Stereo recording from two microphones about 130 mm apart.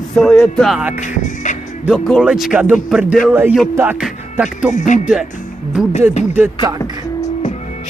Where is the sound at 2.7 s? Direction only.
Centre (ahead or behind).